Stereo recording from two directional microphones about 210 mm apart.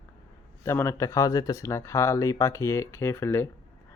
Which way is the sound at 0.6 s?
10° left (ahead or behind).